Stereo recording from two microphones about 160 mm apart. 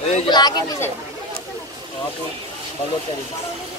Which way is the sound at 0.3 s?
25° left (ahead or behind).